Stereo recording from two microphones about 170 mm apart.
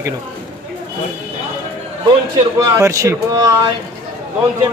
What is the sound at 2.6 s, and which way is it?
Speech, 20° right (ahead or behind).